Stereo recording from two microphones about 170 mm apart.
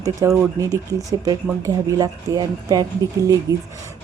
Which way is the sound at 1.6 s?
20° right (ahead or behind).